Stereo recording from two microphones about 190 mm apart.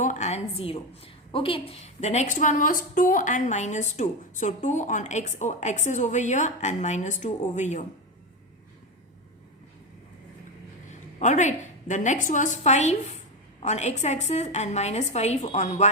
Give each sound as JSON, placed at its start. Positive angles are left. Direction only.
{"t": 0.0, "sound": "a woman's voice", "side_deg": 40}
{"t": 11.2, "sound": "a woman's voice", "side_deg": 40}